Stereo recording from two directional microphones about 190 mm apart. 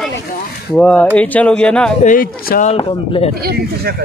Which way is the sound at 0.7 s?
5° left (ahead or behind).